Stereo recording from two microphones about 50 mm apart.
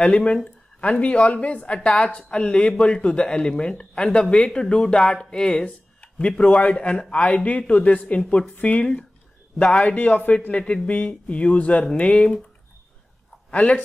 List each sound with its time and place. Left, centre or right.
0.1 s a man's voice: left
3.0 s speech: left
8.5 s speech: left
9.8 s speech: left
13.5 s speech: left